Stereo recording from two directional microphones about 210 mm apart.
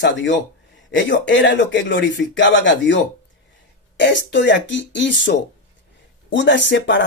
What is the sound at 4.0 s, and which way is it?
Speech, 55° left (ahead or behind).